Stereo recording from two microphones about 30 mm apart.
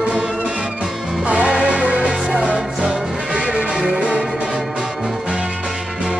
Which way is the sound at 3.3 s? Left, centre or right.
Right.